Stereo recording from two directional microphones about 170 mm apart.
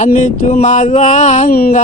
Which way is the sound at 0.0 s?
45° left (ahead or behind).